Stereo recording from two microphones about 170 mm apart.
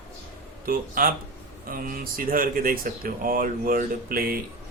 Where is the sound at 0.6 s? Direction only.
55° right (ahead or behind).